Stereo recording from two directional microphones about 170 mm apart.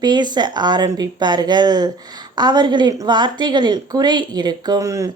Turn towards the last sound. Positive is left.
turn(degrees=-20)  # may be behind; listen again after turning